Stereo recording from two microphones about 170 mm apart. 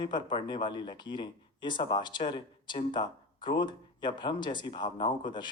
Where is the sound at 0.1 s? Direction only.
25° left (ahead or behind).